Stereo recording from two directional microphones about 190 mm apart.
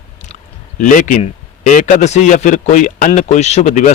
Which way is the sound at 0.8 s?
40° left (ahead or behind).